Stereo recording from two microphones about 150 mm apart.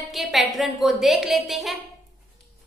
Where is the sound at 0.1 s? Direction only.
Centre (ahead or behind).